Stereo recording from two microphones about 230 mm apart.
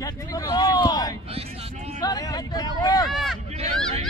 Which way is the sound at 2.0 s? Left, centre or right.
Centre.